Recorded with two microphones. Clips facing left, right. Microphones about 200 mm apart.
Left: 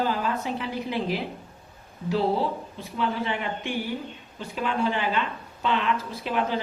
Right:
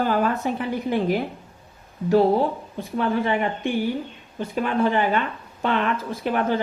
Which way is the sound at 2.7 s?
50° right (ahead or behind).